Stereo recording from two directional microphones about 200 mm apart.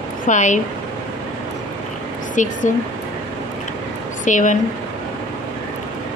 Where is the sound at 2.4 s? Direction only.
40° left (ahead or behind).